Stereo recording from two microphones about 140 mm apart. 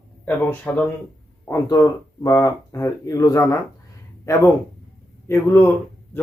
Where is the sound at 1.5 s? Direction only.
25° left (ahead or behind).